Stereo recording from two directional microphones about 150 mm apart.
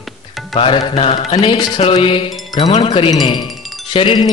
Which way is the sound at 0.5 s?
35° left (ahead or behind).